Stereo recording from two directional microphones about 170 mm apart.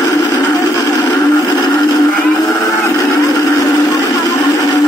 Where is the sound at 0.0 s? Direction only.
20° left (ahead or behind).